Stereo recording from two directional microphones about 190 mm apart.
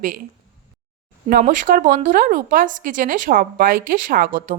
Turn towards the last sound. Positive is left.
turn(degrees=-45)  # may be behind; listen again after turning